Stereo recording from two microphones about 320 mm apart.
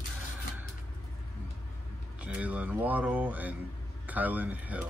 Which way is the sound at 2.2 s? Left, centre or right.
Centre.